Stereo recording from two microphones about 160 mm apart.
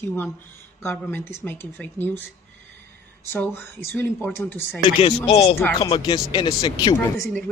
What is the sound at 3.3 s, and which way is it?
Speech, 10° left (ahead or behind).